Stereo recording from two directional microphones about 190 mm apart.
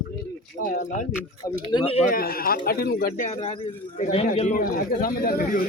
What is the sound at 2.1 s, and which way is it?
A man's voice, 50° left (ahead or behind).